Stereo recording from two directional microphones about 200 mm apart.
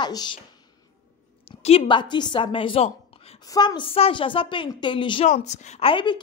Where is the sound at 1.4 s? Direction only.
30° left (ahead or behind).